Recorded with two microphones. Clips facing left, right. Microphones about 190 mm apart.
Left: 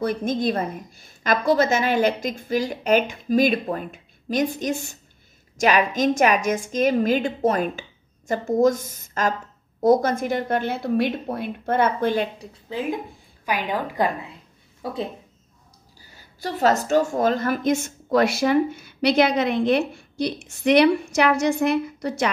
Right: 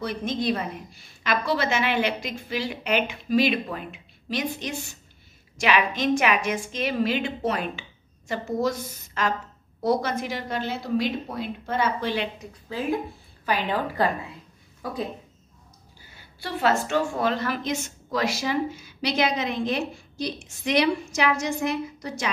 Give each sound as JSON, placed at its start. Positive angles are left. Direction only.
{"t": 0.0, "sound": "a woman's voice", "side_deg": 50}
{"t": 12.6, "sound": "a woman's voice", "side_deg": 20}
{"t": 14.8, "sound": "speech", "side_deg": 25}
{"t": 16.0, "sound": "a woman's voice", "side_deg": 40}